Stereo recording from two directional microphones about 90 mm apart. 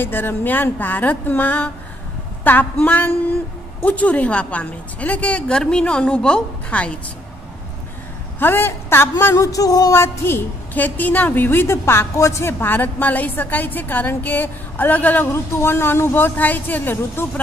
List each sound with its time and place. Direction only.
0.0 s a woman's voice: 20° left (ahead or behind)
8.4 s a woman's voice: 25° left (ahead or behind)
15.3 s a woman's voice: 30° left (ahead or behind)